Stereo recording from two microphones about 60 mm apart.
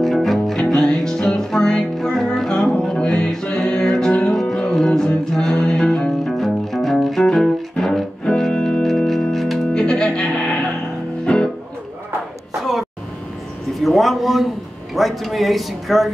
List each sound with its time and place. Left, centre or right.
0.0 s music: centre
8.8 s music: centre
9.8 s music: centre
13.7 s a sound: centre